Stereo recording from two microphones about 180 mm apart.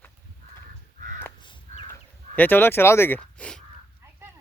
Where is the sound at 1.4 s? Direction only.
25° left (ahead or behind).